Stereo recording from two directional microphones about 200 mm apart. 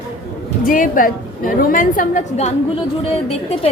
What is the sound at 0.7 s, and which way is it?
A woman's voice, 45° left (ahead or behind).